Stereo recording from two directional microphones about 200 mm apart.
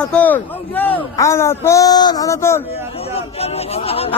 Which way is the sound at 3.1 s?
30° left (ahead or behind).